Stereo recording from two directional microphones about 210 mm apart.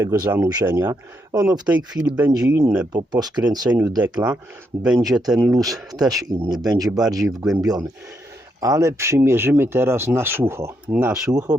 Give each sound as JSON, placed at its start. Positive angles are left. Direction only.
{"t": 0.0, "sound": "speech", "side_deg": -15}
{"t": 4.8, "sound": "speech", "side_deg": -5}
{"t": 7.3, "sound": "speech", "side_deg": -5}
{"t": 7.6, "sound": "speech", "side_deg": -20}